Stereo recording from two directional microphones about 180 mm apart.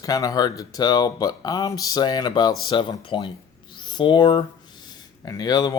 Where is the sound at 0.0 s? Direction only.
20° left (ahead or behind).